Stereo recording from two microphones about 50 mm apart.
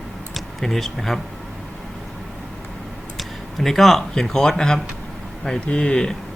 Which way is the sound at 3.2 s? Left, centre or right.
Centre.